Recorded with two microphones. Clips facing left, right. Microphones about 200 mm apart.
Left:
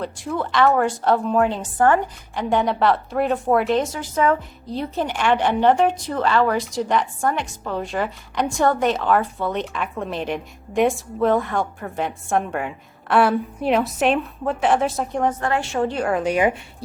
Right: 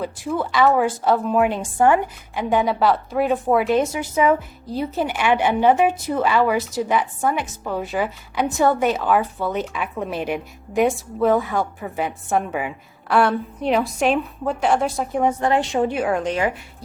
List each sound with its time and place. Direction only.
0.0 s a woman's voice: 5° right (ahead or behind)
1.4 s a woman's voice: 15° right (ahead or behind)
16.0 s a woman's voice: centre (ahead or behind)
16.3 s speech: 20° left (ahead or behind)